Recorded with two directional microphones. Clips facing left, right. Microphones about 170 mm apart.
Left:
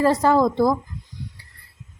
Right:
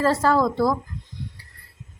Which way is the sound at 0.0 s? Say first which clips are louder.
Left 2 dB; 20° left (ahead or behind).